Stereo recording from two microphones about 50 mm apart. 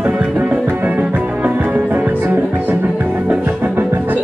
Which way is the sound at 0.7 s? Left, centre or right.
Right.